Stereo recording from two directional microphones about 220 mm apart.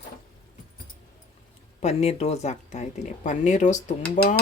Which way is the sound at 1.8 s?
30° left (ahead or behind).